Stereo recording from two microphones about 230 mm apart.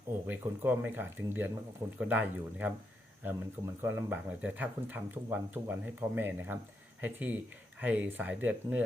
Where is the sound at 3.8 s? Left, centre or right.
Centre.